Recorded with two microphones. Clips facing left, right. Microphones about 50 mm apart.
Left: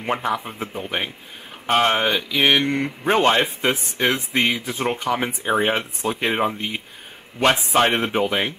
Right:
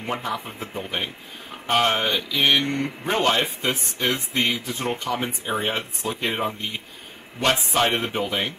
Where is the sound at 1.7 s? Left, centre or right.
Left.